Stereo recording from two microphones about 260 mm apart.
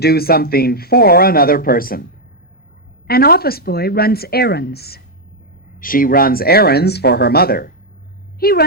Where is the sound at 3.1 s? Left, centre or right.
Left.